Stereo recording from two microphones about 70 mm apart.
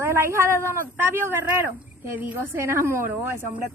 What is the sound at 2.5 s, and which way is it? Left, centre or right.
Speech, right.